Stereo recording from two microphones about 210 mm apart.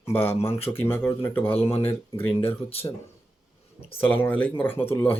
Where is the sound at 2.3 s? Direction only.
25° left (ahead or behind).